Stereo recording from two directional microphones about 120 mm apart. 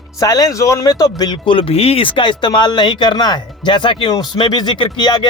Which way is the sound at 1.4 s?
45° left (ahead or behind).